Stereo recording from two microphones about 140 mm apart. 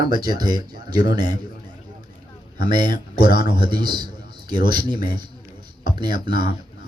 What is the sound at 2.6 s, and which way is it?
A man's voice, 30° right (ahead or behind).